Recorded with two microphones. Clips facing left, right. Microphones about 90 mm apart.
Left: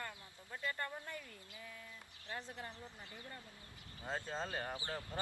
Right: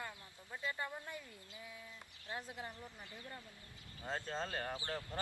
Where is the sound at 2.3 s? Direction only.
10° right (ahead or behind).